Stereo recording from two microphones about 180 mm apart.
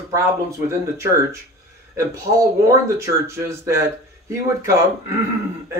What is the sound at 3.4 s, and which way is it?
Speech, 15° right (ahead or behind).